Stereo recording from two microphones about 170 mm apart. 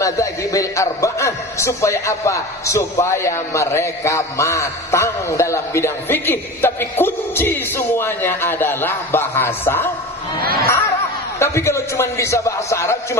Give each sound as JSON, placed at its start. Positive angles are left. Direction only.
{"t": 0.0, "sound": "a man's voice", "side_deg": 20}
{"t": 10.4, "sound": "speech", "side_deg": -60}
{"t": 11.3, "sound": "a man's voice", "side_deg": 15}